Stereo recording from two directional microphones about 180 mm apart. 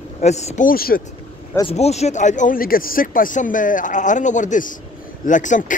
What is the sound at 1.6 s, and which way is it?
Speech, 35° left (ahead or behind).